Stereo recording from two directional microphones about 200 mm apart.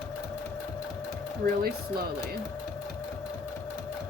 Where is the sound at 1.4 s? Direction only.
50° right (ahead or behind).